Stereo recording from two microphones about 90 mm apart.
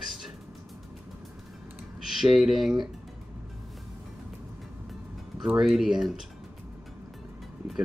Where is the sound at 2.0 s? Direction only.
5° right (ahead or behind).